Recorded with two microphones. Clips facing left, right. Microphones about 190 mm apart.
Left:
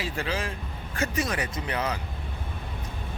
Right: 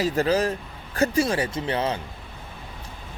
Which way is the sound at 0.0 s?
40° right (ahead or behind).